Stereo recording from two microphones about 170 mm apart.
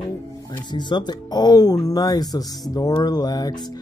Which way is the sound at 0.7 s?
25° left (ahead or behind).